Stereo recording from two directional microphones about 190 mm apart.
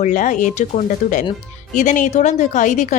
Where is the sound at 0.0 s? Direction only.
40° left (ahead or behind).